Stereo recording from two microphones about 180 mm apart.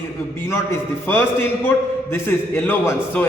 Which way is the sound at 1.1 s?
10° left (ahead or behind).